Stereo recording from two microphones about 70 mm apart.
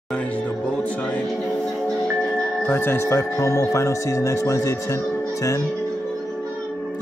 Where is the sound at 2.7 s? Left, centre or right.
Left.